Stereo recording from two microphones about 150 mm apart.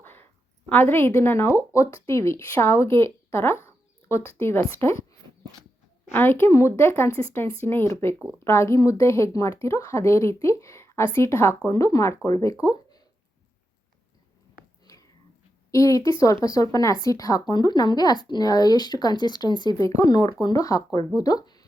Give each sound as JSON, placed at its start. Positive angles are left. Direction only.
{"t": 0.0, "sound": "a sound", "side_deg": 15}
{"t": 0.7, "sound": "a woman's voice", "side_deg": 15}
{"t": 6.1, "sound": "a woman's voice", "side_deg": 15}
{"t": 15.7, "sound": "a woman's voice", "side_deg": 20}